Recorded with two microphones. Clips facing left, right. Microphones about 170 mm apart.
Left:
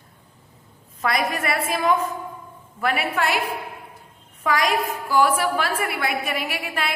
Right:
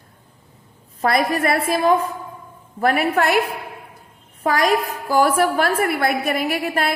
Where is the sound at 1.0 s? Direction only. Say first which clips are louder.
Right 5 dB; 35° right (ahead or behind).